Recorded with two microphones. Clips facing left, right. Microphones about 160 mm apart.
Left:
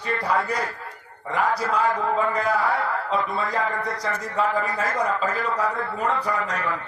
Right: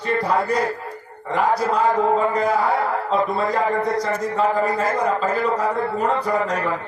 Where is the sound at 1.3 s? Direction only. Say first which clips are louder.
Right 4 dB; 30° right (ahead or behind).